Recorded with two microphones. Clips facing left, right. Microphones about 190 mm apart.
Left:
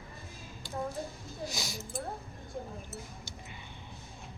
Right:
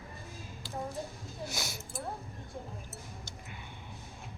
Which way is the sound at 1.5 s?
60° right (ahead or behind).